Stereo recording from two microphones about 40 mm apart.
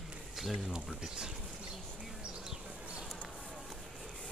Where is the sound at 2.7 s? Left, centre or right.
Right.